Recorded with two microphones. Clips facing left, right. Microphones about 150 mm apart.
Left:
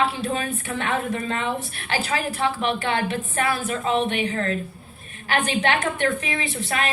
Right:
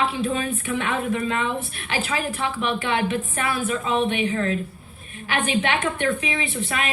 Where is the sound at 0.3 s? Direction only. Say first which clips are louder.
Right 2 dB; 40° left (ahead or behind).